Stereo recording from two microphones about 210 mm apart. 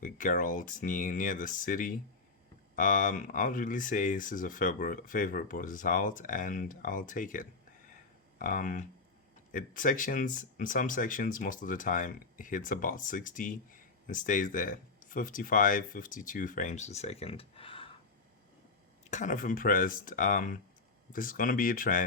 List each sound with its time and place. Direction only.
0.0 s speech: 40° left (ahead or behind)
19.1 s speech: 35° left (ahead or behind)